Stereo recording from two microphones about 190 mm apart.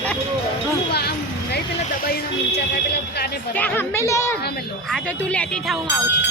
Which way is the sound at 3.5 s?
10° left (ahead or behind).